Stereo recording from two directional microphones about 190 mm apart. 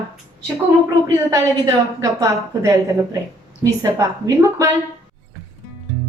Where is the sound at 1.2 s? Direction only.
15° right (ahead or behind).